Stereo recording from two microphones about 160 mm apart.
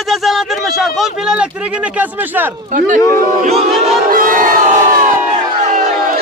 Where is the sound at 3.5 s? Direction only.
40° right (ahead or behind).